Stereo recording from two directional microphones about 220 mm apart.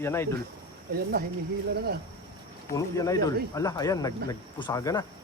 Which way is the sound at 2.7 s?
15° left (ahead or behind).